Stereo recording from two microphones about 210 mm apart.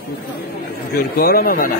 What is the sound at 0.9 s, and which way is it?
Speech, 45° left (ahead or behind).